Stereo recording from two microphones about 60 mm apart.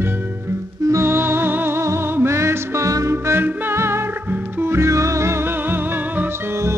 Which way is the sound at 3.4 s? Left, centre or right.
Right.